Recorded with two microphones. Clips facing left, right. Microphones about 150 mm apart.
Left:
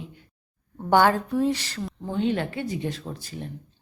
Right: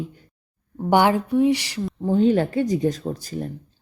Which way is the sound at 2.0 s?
40° right (ahead or behind).